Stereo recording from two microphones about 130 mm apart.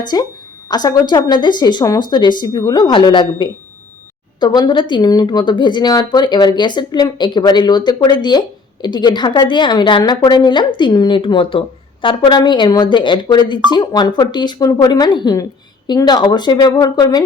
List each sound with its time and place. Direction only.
0.1 s speech: 30° left (ahead or behind)